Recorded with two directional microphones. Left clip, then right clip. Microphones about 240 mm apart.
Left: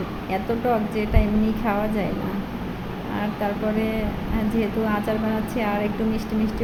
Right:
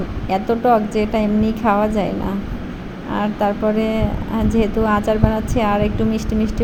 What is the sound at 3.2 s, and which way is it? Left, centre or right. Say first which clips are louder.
Speech: right 7 dB; right.